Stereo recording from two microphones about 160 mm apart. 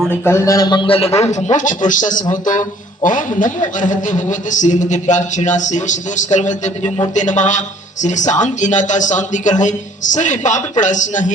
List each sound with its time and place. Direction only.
0.3 s a man's voice: 20° left (ahead or behind); by 11.3 s 50° left (ahead or behind)